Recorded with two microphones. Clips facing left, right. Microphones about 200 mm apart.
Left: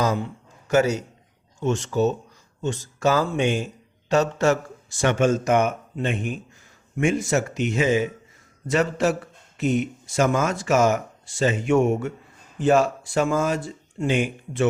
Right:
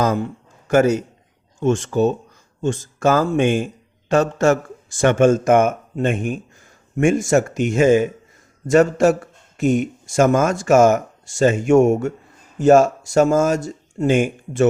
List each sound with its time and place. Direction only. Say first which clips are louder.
0.0 s a man's voice: right 4 dB; 50° right (ahead or behind)